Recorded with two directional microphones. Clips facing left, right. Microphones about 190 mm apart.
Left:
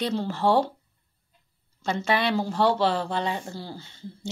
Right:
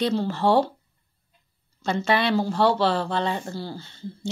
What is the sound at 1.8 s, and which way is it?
Speech, 10° left (ahead or behind).